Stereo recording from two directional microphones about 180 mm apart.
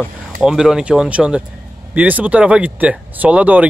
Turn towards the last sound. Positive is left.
turn(degrees=-5)  # may be behind; listen again after turning